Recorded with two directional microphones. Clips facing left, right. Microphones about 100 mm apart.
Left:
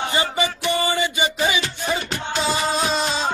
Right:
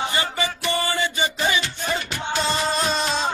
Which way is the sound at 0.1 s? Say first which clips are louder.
Left 3 dB; 20° left (ahead or behind).